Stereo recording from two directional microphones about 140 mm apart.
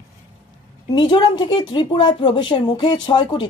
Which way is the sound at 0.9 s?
35° left (ahead or behind).